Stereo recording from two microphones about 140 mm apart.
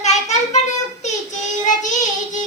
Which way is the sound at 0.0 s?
55° left (ahead or behind).